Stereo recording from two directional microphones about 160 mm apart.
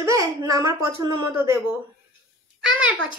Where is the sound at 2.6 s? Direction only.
5° right (ahead or behind).